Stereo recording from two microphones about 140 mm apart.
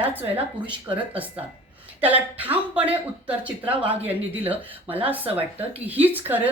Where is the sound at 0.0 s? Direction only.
15° right (ahead or behind).